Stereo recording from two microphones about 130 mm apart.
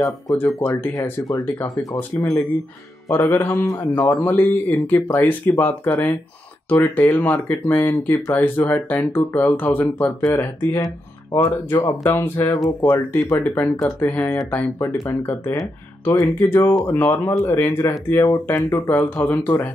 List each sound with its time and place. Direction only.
0.0 s speech: 25° left (ahead or behind)
0.6 s speech: 15° left (ahead or behind)
12.1 s speech: 15° left (ahead or behind)
16.1 s speech: 30° left (ahead or behind)
16.3 s speech: 15° left (ahead or behind)
18.3 s speech: 30° left (ahead or behind)